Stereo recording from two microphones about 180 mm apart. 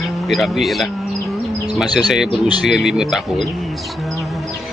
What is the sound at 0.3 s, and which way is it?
Speech, centre (ahead or behind).